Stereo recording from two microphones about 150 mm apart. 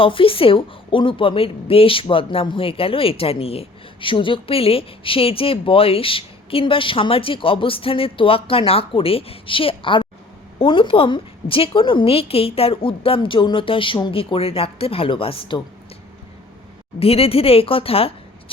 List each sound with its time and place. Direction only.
0.0 s a woman's voice: 35° left (ahead or behind)
17.0 s a woman's voice: 40° left (ahead or behind)